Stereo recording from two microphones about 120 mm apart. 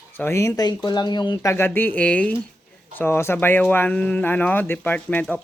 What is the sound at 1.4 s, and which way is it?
Speech, 20° left (ahead or behind).